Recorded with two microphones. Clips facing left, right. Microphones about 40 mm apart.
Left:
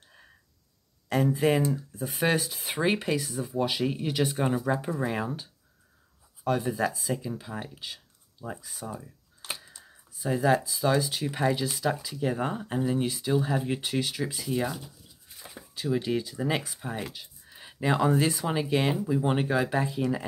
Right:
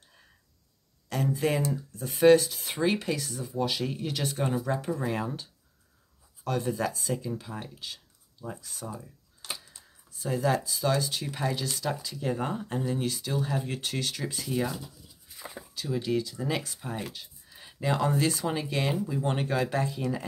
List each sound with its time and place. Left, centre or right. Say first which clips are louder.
1.0 s a sound: left 5 dB; centre
1.4 s speech: left 3 dB; left
9.4 s computer keyboard: left 1 dB; left
9.8 s speech: left 1 dB; centre
15.7 s speech: left 2 dB; left